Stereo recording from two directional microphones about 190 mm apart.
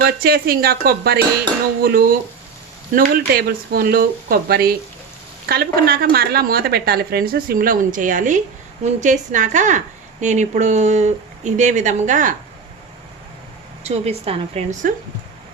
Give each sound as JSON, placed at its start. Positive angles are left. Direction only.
{"t": 0.0, "sound": "a woman's voice", "side_deg": -50}
{"t": 13.8, "sound": "a woman's voice", "side_deg": -35}